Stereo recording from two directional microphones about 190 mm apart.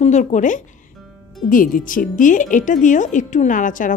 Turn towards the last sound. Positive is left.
turn(degrees=45)  # may be behind; listen again after turning